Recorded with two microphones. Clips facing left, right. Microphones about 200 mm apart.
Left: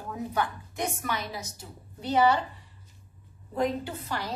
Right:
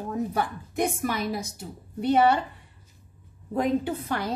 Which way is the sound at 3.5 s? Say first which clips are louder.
Right 4 dB; 55° right (ahead or behind).